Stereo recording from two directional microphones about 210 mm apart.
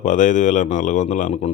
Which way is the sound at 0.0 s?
35° left (ahead or behind).